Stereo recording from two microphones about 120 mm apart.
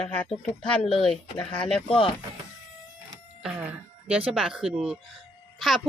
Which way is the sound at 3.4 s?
10° right (ahead or behind).